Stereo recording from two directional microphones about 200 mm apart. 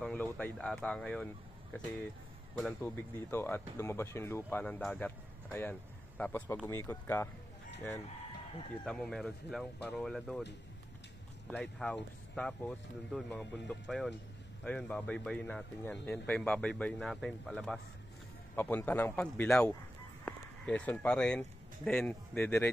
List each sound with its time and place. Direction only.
0.0 s speech: 5° left (ahead or behind)
8.8 s speech: 5° left (ahead or behind)
11.4 s speech: 5° left (ahead or behind)